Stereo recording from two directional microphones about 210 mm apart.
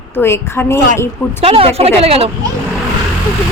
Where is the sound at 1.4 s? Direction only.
25° right (ahead or behind).